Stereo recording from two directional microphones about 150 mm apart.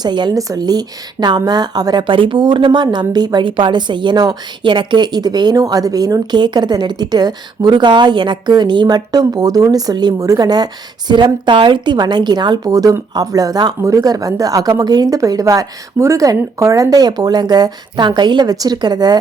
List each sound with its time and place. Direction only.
0.0 s speech: 30° right (ahead or behind)